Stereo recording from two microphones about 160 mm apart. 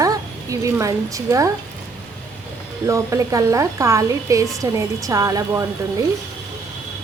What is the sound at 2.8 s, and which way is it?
A woman's voice, 20° right (ahead or behind).